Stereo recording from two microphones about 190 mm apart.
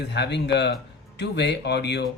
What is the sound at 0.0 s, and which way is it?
Speech, 60° left (ahead or behind).